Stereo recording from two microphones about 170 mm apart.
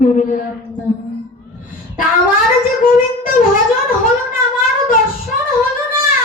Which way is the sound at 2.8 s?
55° left (ahead or behind).